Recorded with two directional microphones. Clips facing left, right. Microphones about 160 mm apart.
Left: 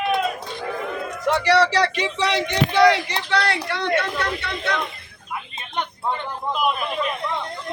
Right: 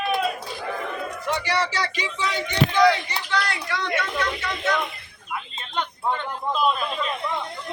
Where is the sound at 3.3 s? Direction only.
65° left (ahead or behind).